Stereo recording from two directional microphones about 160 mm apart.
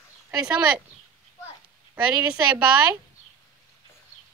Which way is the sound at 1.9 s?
10° right (ahead or behind).